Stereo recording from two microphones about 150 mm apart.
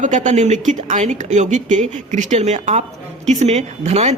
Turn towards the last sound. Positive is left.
turn(degrees=-45)  # may be behind; listen again after turning